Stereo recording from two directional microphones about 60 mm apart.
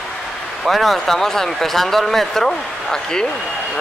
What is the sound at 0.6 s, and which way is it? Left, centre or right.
A man's voice, centre.